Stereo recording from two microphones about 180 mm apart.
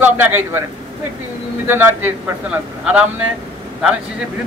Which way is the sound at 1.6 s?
10° right (ahead or behind).